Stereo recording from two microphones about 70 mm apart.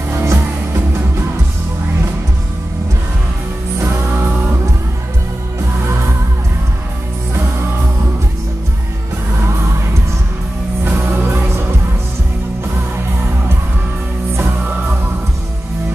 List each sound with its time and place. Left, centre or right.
0.1 s music: right
3.8 s music: right
10.8 s music: right